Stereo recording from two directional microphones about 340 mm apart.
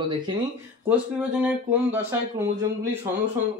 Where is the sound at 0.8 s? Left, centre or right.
Centre.